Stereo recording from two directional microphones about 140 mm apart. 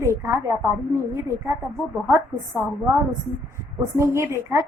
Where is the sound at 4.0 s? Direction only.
20° right (ahead or behind).